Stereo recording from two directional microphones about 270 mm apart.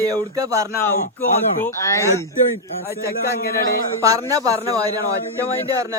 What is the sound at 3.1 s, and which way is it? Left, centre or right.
Speech, left.